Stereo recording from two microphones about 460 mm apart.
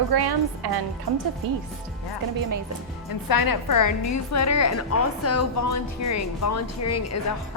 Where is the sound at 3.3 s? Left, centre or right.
Left.